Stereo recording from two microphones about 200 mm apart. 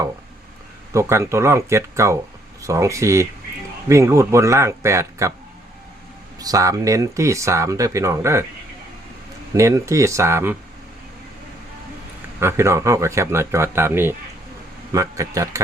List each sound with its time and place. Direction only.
0.9 s speech: 15° right (ahead or behind)
6.4 s speech: 15° right (ahead or behind)
9.6 s speech: 15° right (ahead or behind)
12.4 s speech: 15° right (ahead or behind)